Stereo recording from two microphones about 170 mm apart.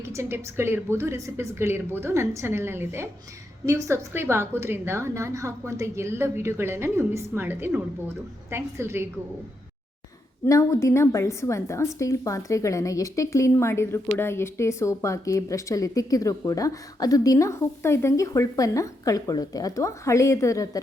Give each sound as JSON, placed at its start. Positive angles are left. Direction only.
{"t": 0.0, "sound": "a woman's voice", "side_deg": -15}
{"t": 10.4, "sound": "a woman's voice", "side_deg": 15}